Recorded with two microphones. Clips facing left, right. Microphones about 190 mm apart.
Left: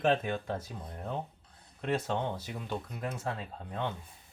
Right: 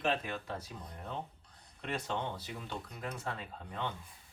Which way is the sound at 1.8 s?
50° left (ahead or behind).